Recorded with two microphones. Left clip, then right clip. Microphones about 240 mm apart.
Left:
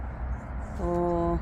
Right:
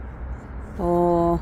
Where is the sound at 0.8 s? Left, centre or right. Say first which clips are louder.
Right 8 dB; right.